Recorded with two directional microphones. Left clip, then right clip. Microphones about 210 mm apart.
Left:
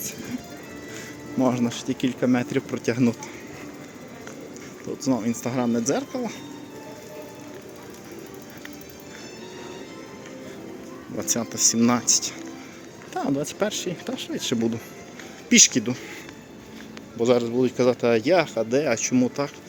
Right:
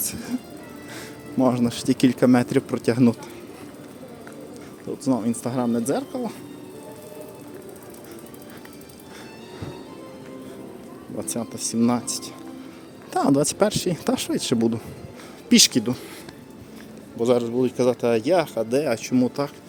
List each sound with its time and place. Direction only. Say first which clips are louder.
1.4 s speech: right 2 dB; 10° right (ahead or behind)
5.0 s speech: right 1 dB; 10° right (ahead or behind)
11.2 s speech: left 6 dB; 5° right (ahead or behind)
13.1 s speech: right 6 dB; 25° right (ahead or behind)
17.2 s speech: even; 5° right (ahead or behind)